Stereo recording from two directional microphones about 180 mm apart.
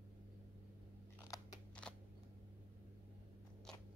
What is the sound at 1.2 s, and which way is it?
Crunch, 20° left (ahead or behind).